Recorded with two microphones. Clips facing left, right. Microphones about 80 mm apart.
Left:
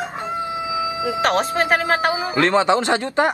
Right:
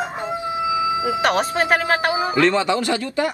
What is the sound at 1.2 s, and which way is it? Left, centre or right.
Speech, centre.